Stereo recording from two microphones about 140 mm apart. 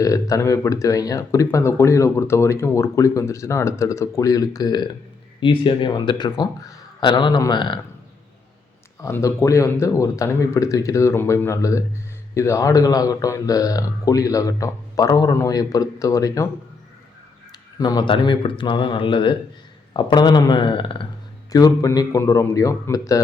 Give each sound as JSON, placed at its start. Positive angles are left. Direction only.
{"t": 0.0, "sound": "speech", "side_deg": 25}
{"t": 9.0, "sound": "speech", "side_deg": 20}
{"t": 17.7, "sound": "speech", "side_deg": 30}
{"t": 21.5, "sound": "speech", "side_deg": 25}